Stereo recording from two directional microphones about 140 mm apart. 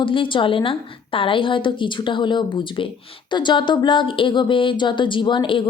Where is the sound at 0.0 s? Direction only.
35° left (ahead or behind).